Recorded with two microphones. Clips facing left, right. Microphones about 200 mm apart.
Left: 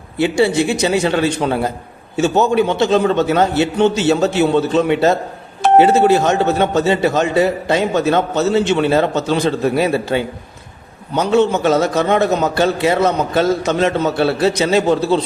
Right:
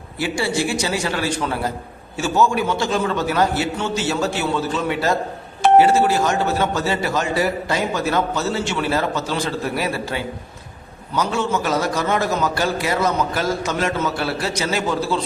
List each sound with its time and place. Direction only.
0.2 s a man's voice: 20° left (ahead or behind)